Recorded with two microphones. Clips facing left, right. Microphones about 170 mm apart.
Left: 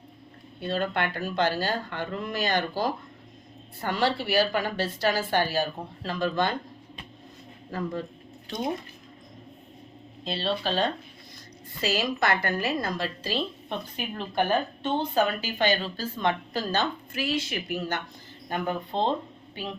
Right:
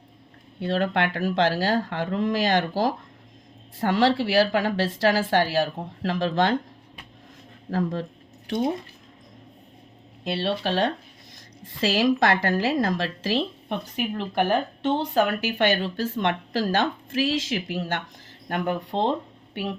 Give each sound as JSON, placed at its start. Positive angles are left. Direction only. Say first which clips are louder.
{"t": 0.6, "sound": "speech", "louder": "right 4 dB", "side_deg": -90}
{"t": 7.7, "sound": "speech", "louder": "right 5 dB", "side_deg": -90}
{"t": 10.2, "sound": "speech", "louder": "right 3 dB", "side_deg": -70}
{"t": 11.6, "sound": "speech", "louder": "right 6 dB", "side_deg": -90}
{"t": 14.8, "sound": "speech", "louder": "right 3 dB", "side_deg": -90}
{"t": 18.4, "sound": "speech", "louder": "right 3 dB", "side_deg": -75}